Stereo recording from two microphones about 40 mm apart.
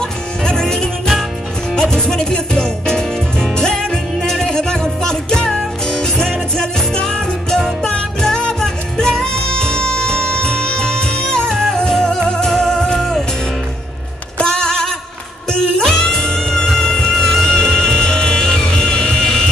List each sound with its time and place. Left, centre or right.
0.5 s music: centre
14.4 s a sound: centre
15.5 s music: centre